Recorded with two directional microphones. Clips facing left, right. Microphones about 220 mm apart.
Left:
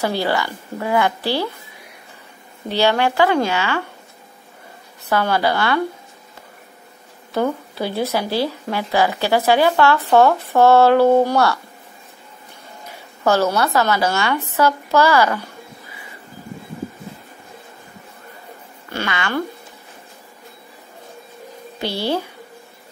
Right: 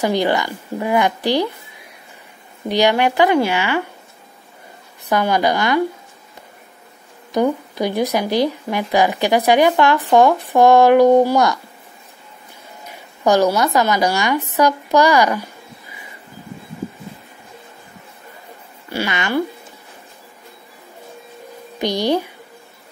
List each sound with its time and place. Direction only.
0.0 s speech: 15° right (ahead or behind)
2.7 s speech: 15° right (ahead or behind)
5.1 s speech: 15° right (ahead or behind)
7.3 s speech: 15° right (ahead or behind)
13.2 s speech: 15° right (ahead or behind)
19.0 s speech: 20° right (ahead or behind)
21.7 s a woman's voice: 15° right (ahead or behind)